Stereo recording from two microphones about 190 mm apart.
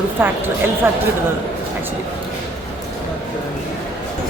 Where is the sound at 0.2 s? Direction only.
10° right (ahead or behind).